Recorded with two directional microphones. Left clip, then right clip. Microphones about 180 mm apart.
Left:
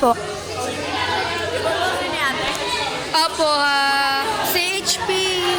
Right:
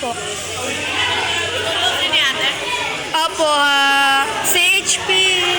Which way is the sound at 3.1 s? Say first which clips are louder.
Right 2 dB; centre (ahead or behind).